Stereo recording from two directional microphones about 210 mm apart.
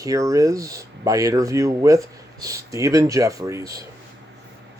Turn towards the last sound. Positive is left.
turn(degrees=-15)  # may be behind; listen again after turning